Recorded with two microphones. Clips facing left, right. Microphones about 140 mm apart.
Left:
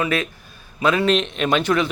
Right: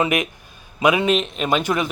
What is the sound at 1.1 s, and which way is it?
Speech, 5° right (ahead or behind).